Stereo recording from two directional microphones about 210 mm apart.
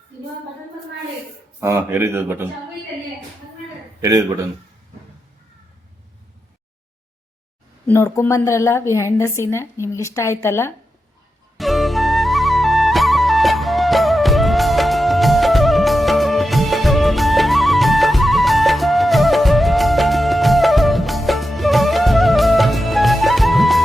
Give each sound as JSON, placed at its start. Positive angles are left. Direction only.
{"t": 1.6, "sound": "speech", "side_deg": -10}
{"t": 4.0, "sound": "speech", "side_deg": -15}
{"t": 7.9, "sound": "a woman's voice", "side_deg": 15}
{"t": 11.5, "sound": "music", "side_deg": 0}